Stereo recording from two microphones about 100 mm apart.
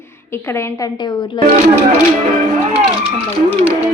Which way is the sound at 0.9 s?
50° left (ahead or behind).